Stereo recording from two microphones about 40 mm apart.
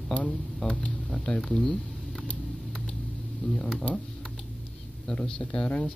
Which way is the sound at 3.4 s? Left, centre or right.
Left.